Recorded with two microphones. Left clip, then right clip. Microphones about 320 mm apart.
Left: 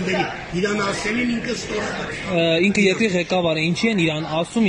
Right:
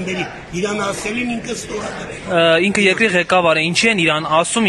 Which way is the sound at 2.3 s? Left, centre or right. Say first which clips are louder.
Right 5 dB; right.